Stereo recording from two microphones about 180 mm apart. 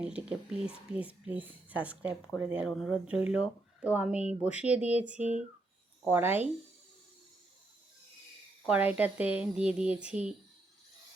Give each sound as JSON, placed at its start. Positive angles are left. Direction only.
{"t": 0.0, "sound": "speech", "side_deg": -5}
{"t": 8.6, "sound": "speech", "side_deg": -10}